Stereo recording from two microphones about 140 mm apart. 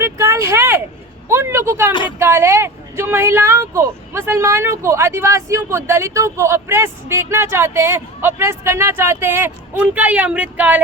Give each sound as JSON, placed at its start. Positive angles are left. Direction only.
{"t": 0.0, "sound": "a sound", "side_deg": -20}
{"t": 1.3, "sound": "speech", "side_deg": -15}
{"t": 1.9, "sound": "speech", "side_deg": 35}
{"t": 2.1, "sound": "speech", "side_deg": -15}